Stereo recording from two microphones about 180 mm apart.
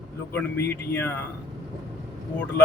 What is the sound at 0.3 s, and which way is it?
Speech, 10° left (ahead or behind).